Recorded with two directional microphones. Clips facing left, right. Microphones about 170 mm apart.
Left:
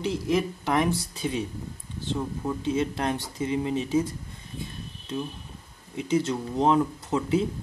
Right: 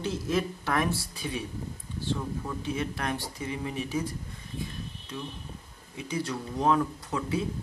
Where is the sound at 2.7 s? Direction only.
25° left (ahead or behind).